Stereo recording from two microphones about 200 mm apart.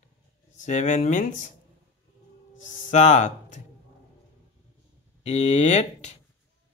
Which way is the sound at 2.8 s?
35° left (ahead or behind).